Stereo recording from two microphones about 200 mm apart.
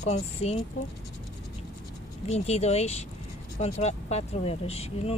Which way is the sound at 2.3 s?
35° left (ahead or behind).